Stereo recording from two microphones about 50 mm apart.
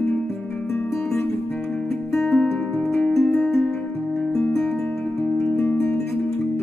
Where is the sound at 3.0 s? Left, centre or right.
Left.